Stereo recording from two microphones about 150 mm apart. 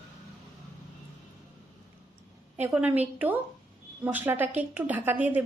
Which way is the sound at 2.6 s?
10° right (ahead or behind).